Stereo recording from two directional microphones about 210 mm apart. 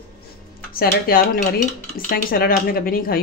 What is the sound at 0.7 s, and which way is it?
Speech, 45° left (ahead or behind).